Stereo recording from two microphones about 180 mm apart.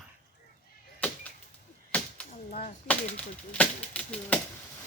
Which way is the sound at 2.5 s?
45° left (ahead or behind).